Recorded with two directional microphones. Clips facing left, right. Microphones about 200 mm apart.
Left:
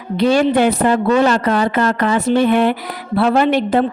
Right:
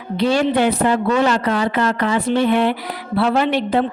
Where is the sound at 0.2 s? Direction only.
50° left (ahead or behind).